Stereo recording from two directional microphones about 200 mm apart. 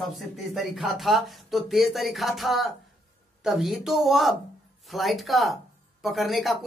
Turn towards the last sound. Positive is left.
turn(degrees=0)  # may be behind; listen again after turning